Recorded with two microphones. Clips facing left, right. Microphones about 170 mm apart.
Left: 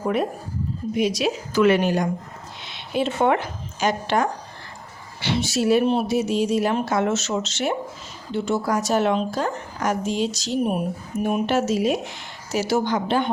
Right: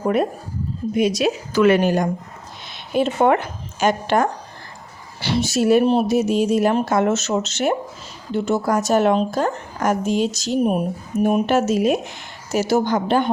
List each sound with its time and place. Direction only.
0.9 s speech: 50° right (ahead or behind)